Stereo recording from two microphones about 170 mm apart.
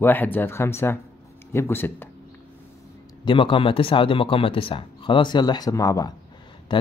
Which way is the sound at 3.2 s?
30° left (ahead or behind).